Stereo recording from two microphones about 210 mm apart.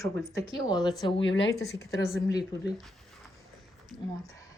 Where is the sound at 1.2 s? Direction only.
60° left (ahead or behind).